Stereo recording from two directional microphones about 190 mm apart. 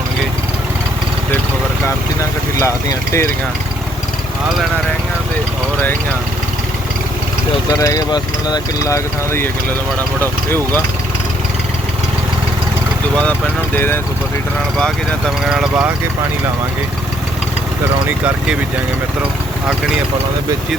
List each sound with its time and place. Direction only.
2.6 s speech: 15° left (ahead or behind)
7.7 s speech: 20° left (ahead or behind)
13.7 s speech: 10° left (ahead or behind)
15.4 s speech: 5° right (ahead or behind)